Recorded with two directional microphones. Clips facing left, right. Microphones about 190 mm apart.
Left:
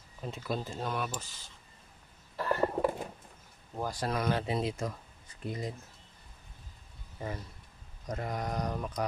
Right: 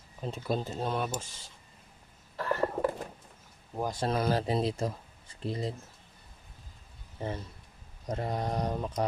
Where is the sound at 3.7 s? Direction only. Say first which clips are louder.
Right 3 dB; 20° right (ahead or behind).